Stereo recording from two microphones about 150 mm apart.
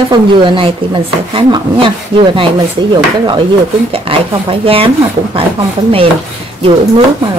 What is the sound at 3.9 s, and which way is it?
Speech, 40° right (ahead or behind).